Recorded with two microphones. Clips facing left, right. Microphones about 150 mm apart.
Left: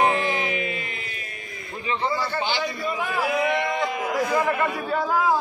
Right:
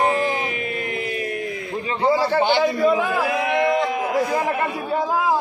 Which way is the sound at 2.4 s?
70° right (ahead or behind).